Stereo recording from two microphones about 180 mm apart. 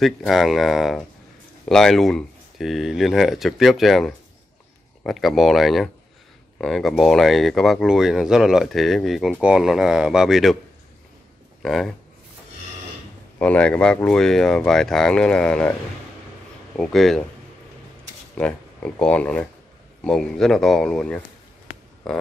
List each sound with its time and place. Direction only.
0.0 s speech: centre (ahead or behind)
11.6 s speech: centre (ahead or behind)
13.4 s speech: 5° left (ahead or behind)
16.7 s speech: 5° left (ahead or behind)
18.4 s speech: 5° left (ahead or behind)